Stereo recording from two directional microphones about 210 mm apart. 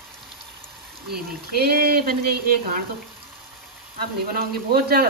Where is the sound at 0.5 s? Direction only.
5° right (ahead or behind).